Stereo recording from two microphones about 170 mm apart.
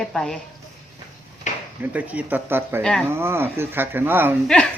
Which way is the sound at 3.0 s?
15° right (ahead or behind).